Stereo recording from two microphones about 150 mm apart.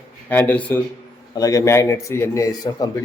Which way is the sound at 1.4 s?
25° left (ahead or behind).